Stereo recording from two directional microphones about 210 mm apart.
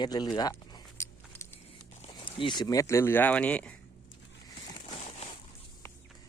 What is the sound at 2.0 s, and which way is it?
Speech, 25° left (ahead or behind).